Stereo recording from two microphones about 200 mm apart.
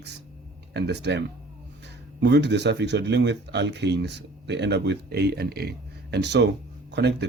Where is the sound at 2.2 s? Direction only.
60° right (ahead or behind).